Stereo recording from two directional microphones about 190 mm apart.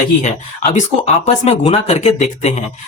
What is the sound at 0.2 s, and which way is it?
Speech, 35° left (ahead or behind).